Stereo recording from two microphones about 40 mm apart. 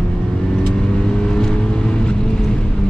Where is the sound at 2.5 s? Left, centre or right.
Left.